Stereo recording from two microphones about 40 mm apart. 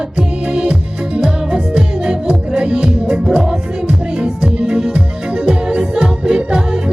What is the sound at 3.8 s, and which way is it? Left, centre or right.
Music, right.